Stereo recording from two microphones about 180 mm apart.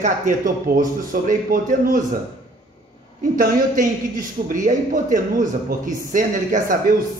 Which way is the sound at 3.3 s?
50° right (ahead or behind).